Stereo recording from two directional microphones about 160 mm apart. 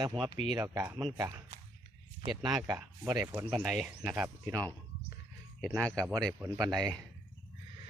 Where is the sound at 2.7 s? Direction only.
15° right (ahead or behind).